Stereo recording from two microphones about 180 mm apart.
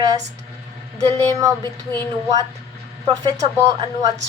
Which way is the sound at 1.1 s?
20° right (ahead or behind).